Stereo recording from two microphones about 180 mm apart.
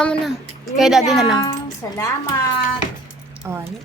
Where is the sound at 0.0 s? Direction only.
5° left (ahead or behind).